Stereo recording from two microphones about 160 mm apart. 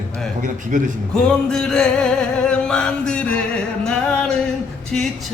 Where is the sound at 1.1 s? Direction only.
5° left (ahead or behind).